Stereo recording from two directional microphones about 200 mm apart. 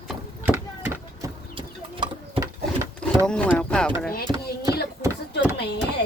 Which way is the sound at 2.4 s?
15° right (ahead or behind).